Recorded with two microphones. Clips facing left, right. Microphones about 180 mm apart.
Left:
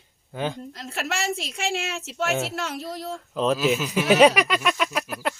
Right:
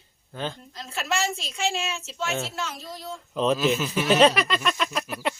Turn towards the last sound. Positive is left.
turn(degrees=0)  # may be behind; listen again after turning